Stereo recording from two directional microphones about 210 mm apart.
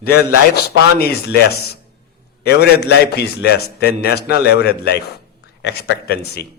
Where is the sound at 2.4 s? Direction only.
50° left (ahead or behind).